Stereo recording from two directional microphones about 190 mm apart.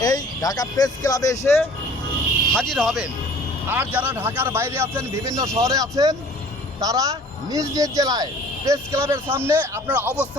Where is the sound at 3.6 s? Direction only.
10° right (ahead or behind).